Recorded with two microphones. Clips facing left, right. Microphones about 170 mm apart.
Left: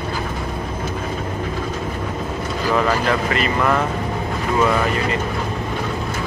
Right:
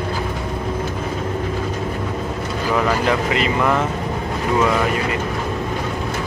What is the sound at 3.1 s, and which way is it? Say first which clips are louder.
Speech: right 1 dB; 15° right (ahead or behind).